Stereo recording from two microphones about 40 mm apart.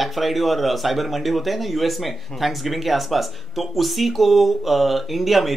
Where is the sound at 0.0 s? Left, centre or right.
Centre.